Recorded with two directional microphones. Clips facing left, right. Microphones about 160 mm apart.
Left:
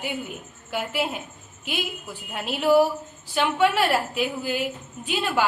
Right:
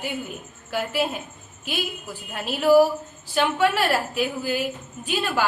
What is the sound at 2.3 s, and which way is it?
A woman's voice, 20° left (ahead or behind).